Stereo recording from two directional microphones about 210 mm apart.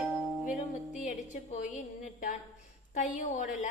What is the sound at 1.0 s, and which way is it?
Speech, 35° left (ahead or behind).